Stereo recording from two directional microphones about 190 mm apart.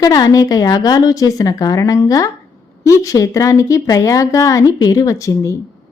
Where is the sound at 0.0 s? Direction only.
20° left (ahead or behind).